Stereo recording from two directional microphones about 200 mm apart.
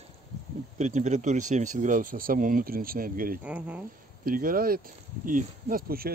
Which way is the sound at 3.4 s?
5° right (ahead or behind).